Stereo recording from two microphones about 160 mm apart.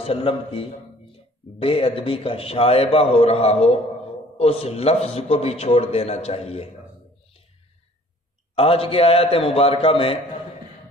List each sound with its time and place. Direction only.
0.0 s a man's voice: 35° left (ahead or behind)
8.5 s a man's voice: 35° left (ahead or behind)